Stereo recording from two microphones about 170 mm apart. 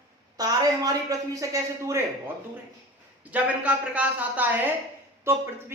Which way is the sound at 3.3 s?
5° right (ahead or behind).